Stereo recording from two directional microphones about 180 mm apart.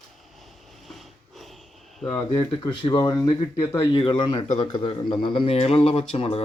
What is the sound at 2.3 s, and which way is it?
Speech, 30° left (ahead or behind).